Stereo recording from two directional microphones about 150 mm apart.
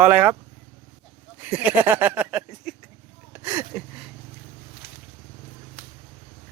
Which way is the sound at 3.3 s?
10° right (ahead or behind).